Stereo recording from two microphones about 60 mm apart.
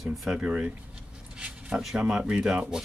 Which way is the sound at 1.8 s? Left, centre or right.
Centre.